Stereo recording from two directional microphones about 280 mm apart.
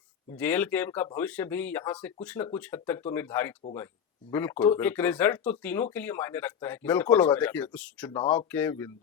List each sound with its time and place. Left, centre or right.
0.3 s speech: centre
8.2 s speech: centre
8.4 s speech: centre